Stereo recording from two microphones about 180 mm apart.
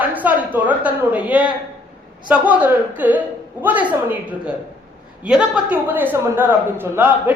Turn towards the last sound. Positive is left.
turn(degrees=-10)  # may be behind; listen again after turning